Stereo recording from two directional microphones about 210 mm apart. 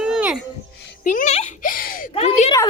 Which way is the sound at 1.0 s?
35° left (ahead or behind).